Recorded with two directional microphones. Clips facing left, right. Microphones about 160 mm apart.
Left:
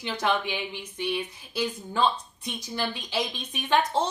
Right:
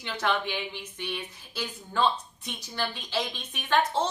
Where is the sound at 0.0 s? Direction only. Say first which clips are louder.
Left 2 dB; 15° left (ahead or behind).